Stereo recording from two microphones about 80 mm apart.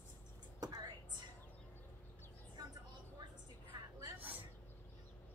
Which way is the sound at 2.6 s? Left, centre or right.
Right.